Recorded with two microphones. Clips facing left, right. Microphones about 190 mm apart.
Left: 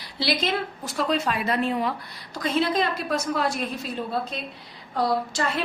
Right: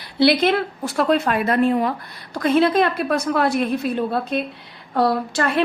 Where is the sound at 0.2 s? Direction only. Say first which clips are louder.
Right 9 dB; 60° right (ahead or behind).